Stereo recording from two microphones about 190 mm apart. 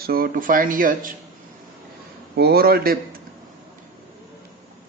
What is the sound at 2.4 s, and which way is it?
Speech, 55° right (ahead or behind).